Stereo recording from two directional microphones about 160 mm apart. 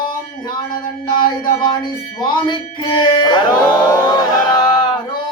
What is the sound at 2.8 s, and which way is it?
Music, 35° left (ahead or behind).